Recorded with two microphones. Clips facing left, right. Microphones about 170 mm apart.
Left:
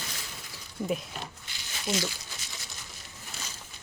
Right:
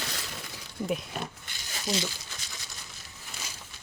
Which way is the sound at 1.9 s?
35° right (ahead or behind).